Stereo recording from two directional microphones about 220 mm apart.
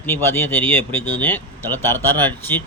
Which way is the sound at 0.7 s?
25° right (ahead or behind).